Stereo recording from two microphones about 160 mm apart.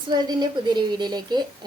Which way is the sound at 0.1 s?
25° right (ahead or behind).